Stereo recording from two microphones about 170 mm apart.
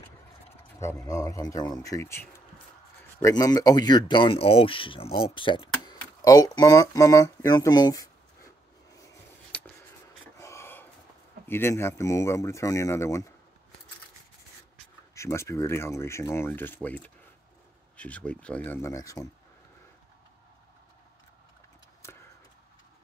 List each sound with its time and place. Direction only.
1.0 s speech: 20° left (ahead or behind)
9.5 s a sound: 5° left (ahead or behind)
10.3 s gasp: 15° left (ahead or behind)
11.4 s speech: 15° left (ahead or behind)
15.1 s speech: 15° left (ahead or behind)
22.0 s a sound: 15° left (ahead or behind)